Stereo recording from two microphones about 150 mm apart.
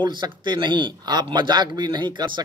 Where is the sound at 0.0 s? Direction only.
30° right (ahead or behind).